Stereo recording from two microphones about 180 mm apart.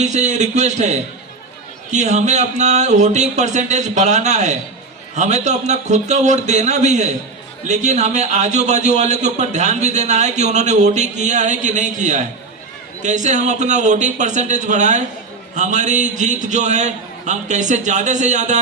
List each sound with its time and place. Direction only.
0.0 s a man's voice: 40° right (ahead or behind)